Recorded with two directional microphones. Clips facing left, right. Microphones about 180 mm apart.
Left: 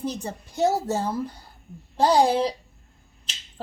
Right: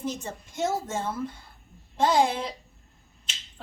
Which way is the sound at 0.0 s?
35° left (ahead or behind).